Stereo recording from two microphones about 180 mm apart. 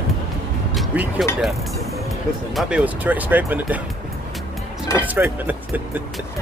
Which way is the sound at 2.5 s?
5° right (ahead or behind).